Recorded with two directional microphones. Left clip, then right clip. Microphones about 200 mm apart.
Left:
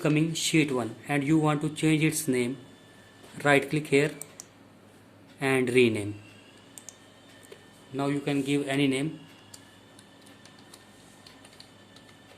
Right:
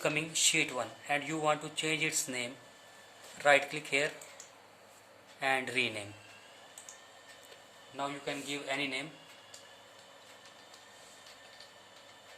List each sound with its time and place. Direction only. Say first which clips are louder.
0.0 s speech: left 4 dB; 20° left (ahead or behind)
5.4 s speech: left 8 dB; 30° left (ahead or behind)
7.9 s a man's voice: left 8 dB; 40° left (ahead or behind)